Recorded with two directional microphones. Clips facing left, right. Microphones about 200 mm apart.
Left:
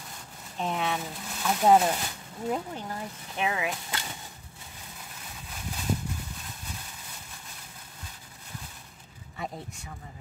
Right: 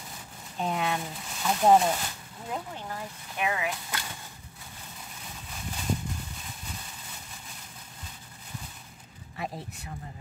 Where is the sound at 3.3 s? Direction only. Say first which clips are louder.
Even; 25° left (ahead or behind).